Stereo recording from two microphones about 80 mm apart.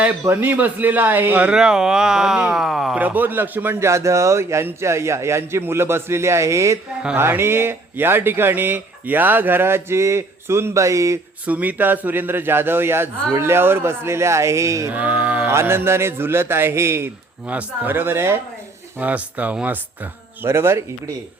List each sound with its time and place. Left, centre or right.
0.3 s speech: right; by 3.0 s centre
3.0 s speech: right
3.8 s a man's voice: right
11.4 s a man's voice: centre; by 14.8 s right
14.8 s speech: centre
15.5 s a man's voice: right
17.5 s speech: right
18.9 s speech: centre
20.4 s a man's voice: right